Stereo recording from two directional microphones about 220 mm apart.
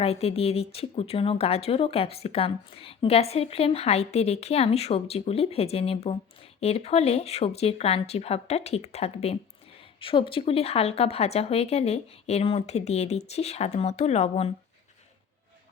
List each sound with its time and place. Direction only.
0.0 s speech: 25° left (ahead or behind)